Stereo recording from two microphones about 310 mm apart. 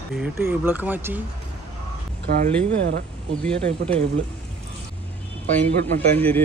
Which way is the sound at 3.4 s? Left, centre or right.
Centre.